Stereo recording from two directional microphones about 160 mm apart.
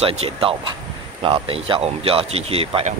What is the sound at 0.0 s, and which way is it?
Speech, 40° right (ahead or behind).